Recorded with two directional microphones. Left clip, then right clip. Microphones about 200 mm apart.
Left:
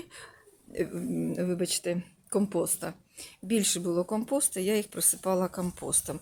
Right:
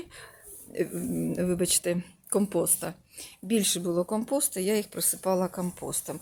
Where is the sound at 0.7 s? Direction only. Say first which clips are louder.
Right 2 dB; 5° right (ahead or behind).